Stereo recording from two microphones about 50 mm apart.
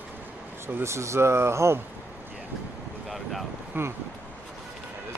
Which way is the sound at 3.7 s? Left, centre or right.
Right.